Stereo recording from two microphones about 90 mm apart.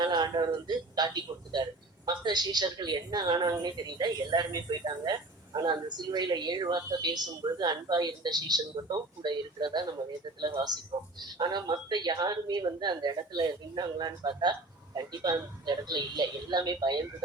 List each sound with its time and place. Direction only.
0.0 s a woman's voice: 50° right (ahead or behind)